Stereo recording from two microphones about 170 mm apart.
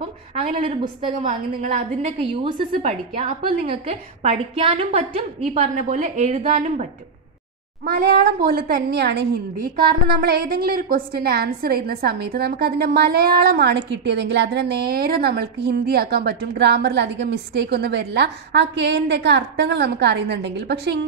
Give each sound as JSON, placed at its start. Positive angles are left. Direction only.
{"t": 0.4, "sound": "a woman's voice", "side_deg": -35}
{"t": 1.0, "sound": "a woman's voice", "side_deg": -50}
{"t": 3.7, "sound": "a woman's voice", "side_deg": -35}
{"t": 7.8, "sound": "a woman's voice", "side_deg": -65}